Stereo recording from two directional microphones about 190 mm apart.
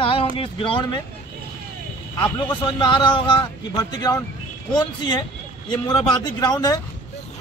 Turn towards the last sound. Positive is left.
turn(degrees=20)  # may be behind; listen again after turning